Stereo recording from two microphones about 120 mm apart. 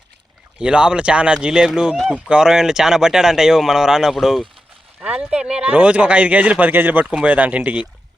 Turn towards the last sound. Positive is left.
turn(degrees=-10)  # may be behind; listen again after turning